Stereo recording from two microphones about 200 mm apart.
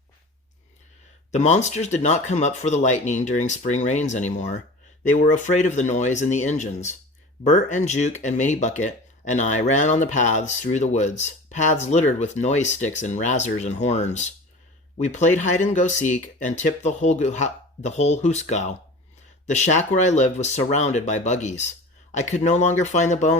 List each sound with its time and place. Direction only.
1.3 s speech: 35° left (ahead or behind)